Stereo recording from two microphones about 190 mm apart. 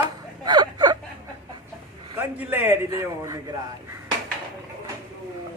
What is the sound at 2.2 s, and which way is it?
Speech, 10° right (ahead or behind).